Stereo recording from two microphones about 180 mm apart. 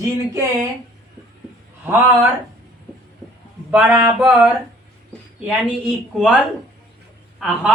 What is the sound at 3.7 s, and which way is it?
A man's voice, 10° right (ahead or behind).